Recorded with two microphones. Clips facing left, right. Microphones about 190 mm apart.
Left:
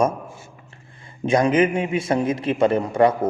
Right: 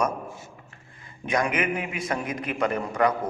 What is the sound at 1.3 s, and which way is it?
A man's voice, 30° left (ahead or behind).